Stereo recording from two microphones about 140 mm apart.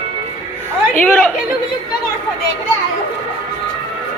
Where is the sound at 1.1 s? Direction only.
5° left (ahead or behind).